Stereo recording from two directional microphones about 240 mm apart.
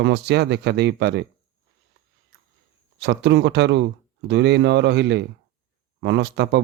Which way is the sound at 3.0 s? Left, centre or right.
Right.